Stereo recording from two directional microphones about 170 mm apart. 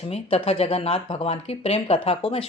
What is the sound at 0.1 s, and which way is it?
Speech, 35° left (ahead or behind).